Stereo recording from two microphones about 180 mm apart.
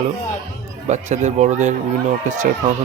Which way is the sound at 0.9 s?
40° right (ahead or behind).